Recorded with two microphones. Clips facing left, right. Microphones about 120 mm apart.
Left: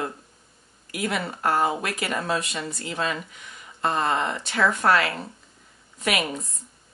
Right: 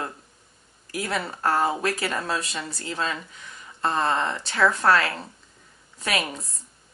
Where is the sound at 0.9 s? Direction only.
35° right (ahead or behind).